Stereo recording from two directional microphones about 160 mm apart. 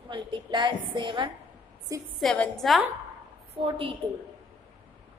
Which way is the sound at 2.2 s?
Centre (ahead or behind).